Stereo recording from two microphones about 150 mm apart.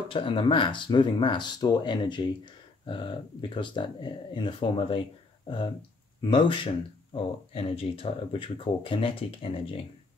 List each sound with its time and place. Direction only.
0.1 s speech: 35° left (ahead or behind)